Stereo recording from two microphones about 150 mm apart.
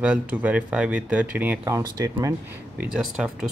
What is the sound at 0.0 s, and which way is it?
Speech, 10° right (ahead or behind).